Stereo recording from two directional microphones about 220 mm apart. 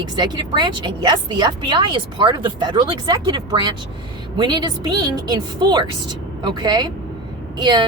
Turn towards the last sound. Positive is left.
turn(degrees=-20)  # may be behind; listen again after turning